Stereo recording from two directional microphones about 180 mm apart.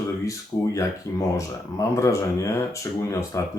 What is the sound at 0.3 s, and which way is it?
Speech, 20° left (ahead or behind).